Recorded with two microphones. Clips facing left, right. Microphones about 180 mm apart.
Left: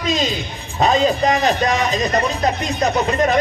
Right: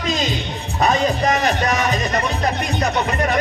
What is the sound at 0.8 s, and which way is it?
Music, 20° left (ahead or behind).